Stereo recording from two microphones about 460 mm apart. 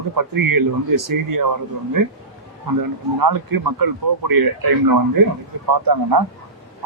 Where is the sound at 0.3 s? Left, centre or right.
Right.